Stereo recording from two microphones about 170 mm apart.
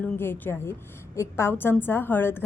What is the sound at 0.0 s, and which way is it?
A woman's voice, 10° left (ahead or behind).